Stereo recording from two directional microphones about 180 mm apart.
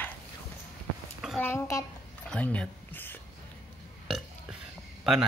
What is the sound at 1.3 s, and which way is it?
Speech, 15° left (ahead or behind).